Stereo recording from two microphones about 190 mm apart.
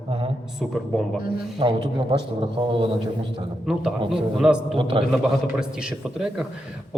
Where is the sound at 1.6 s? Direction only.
25° right (ahead or behind).